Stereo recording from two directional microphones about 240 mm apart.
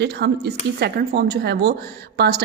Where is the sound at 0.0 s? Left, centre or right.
Right.